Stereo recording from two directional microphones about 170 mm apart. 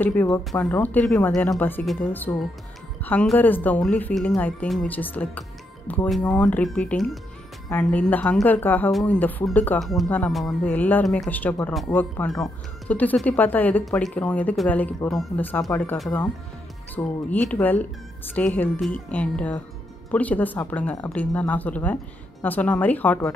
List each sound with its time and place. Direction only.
0.0 s speech: 10° left (ahead or behind)